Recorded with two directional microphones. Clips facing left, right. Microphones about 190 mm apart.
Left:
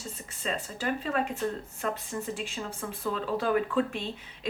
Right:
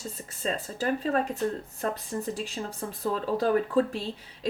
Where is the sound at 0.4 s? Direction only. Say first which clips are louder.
Right 3 dB; 35° right (ahead or behind).